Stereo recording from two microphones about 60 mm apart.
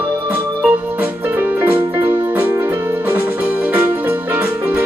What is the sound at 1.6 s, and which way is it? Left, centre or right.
Music, right.